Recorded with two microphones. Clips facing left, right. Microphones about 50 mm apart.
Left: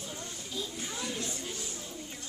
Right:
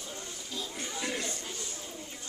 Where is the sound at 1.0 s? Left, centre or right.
Right.